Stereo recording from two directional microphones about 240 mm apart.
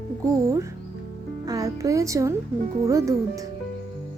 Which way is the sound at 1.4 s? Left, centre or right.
Centre.